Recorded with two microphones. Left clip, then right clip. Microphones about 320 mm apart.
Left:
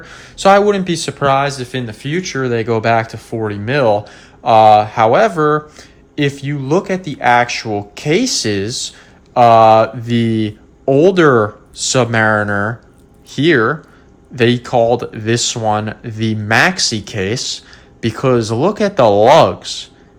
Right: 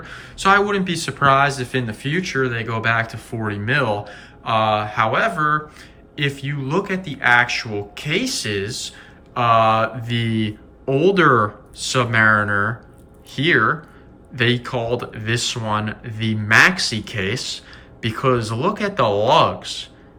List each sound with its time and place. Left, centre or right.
0.0 s speech: centre